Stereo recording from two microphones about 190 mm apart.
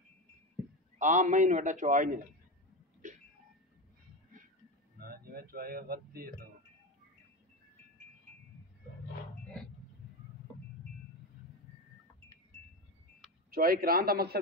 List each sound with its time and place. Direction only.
0.9 s a man's voice: 40° right (ahead or behind)
4.9 s speech: 50° right (ahead or behind)
13.5 s a man's voice: 50° right (ahead or behind)